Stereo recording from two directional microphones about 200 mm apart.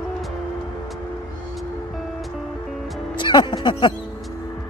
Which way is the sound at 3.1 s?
25° left (ahead or behind).